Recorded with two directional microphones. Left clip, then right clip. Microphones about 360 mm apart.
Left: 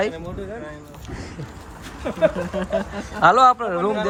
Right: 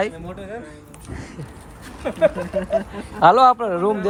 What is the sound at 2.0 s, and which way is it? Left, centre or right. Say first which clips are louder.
Speech: right 2 dB; centre.